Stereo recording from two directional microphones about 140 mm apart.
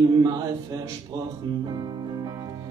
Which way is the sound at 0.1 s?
25° right (ahead or behind).